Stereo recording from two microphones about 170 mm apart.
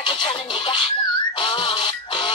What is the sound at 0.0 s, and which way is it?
Music, 30° left (ahead or behind).